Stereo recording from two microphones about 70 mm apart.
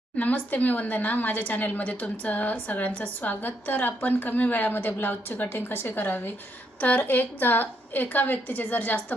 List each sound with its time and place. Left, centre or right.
0.2 s speech: left